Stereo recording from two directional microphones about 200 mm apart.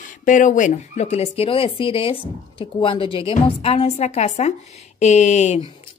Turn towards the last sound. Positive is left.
turn(degrees=35)  # may be behind; listen again after turning